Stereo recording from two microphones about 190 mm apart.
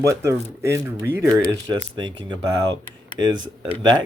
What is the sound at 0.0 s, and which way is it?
Speech, 15° right (ahead or behind).